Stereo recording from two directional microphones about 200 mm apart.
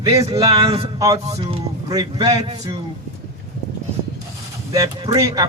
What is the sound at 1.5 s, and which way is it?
A man's voice, 20° right (ahead or behind).